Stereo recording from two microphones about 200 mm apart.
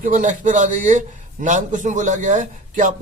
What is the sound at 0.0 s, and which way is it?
A man's voice, 40° right (ahead or behind).